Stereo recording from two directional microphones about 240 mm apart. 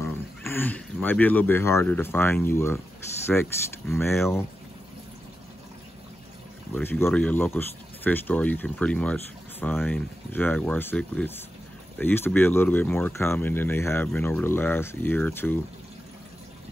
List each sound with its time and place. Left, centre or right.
0.0 s speech: centre
6.7 s speech: centre